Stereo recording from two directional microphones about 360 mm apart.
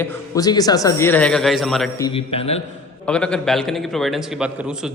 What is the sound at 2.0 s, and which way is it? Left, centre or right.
Speech, centre.